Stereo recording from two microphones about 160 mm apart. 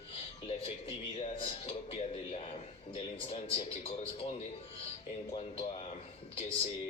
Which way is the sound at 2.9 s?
40° left (ahead or behind).